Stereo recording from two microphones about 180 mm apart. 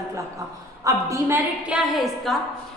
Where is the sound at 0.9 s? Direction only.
20° right (ahead or behind).